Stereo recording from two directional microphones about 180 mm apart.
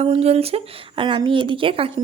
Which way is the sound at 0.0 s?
35° right (ahead or behind).